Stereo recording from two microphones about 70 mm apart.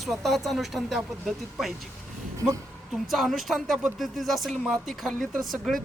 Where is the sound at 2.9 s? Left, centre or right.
Centre.